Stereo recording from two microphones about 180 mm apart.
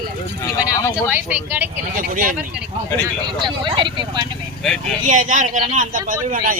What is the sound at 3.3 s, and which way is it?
Speech, 25° right (ahead or behind).